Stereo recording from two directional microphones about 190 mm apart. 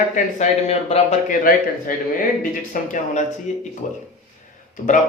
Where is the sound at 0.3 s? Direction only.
35° left (ahead or behind).